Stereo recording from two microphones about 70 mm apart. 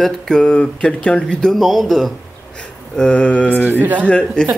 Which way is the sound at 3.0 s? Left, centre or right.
Centre.